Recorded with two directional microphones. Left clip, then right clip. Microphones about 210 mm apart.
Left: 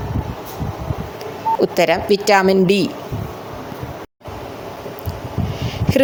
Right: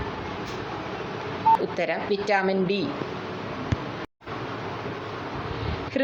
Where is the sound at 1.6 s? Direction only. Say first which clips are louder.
Left 11 dB; 50° left (ahead or behind).